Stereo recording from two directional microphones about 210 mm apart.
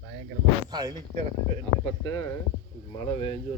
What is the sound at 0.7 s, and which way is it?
Speech, 20° right (ahead or behind).